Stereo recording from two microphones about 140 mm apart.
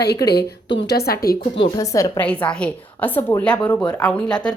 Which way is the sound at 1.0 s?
90° left.